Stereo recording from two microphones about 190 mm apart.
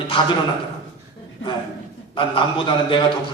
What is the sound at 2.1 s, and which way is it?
Speech, 25° left (ahead or behind).